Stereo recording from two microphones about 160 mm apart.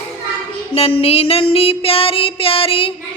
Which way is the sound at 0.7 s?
40° left (ahead or behind).